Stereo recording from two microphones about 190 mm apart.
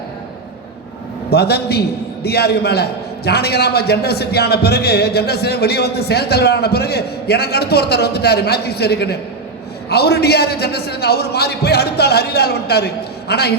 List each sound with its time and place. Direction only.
1.3 s a man's voice: 60° left (ahead or behind)